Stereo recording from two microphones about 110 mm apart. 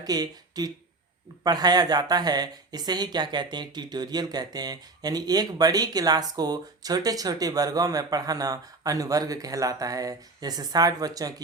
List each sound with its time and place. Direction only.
0.0 s a woman's voice: 35° right (ahead or behind)